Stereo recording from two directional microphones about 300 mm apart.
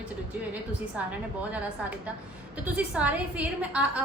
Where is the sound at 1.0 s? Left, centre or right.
Centre.